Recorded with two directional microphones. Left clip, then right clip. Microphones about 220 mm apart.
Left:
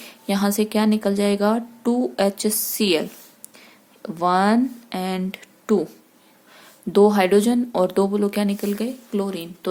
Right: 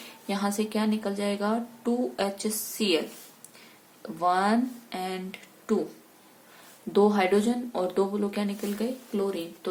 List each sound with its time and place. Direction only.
0.3 s speech: 50° left (ahead or behind)
4.0 s speech: 50° left (ahead or behind)
6.9 s speech: 50° left (ahead or behind)